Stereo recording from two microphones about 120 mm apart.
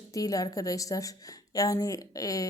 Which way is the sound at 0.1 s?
30° left (ahead or behind).